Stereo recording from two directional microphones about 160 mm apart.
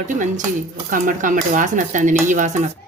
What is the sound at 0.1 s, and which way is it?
Speech, 50° right (ahead or behind).